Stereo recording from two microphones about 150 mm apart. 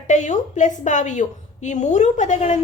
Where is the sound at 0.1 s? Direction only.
55° left (ahead or behind).